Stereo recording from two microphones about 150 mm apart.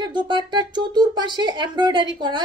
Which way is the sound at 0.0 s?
30° right (ahead or behind).